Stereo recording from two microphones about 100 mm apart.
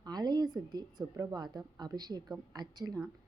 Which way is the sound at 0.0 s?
45° right (ahead or behind).